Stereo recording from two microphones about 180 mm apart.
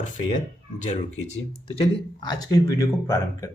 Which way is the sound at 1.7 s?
30° left (ahead or behind).